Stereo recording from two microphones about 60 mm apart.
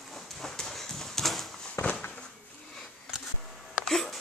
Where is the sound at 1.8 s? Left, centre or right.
Left.